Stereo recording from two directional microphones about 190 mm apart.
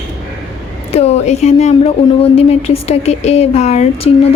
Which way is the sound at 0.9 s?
35° left (ahead or behind).